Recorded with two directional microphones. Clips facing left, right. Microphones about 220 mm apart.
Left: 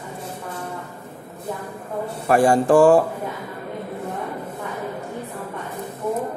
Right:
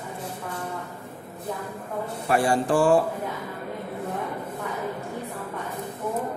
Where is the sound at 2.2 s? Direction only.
45° left (ahead or behind).